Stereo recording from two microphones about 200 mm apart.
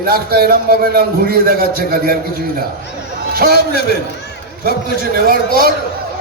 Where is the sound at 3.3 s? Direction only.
50° right (ahead or behind).